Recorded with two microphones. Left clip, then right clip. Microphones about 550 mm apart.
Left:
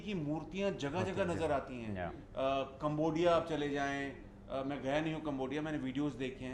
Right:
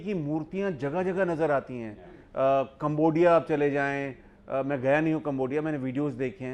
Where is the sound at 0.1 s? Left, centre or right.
Right.